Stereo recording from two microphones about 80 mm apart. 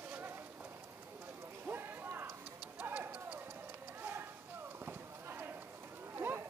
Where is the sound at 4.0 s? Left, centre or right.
Right.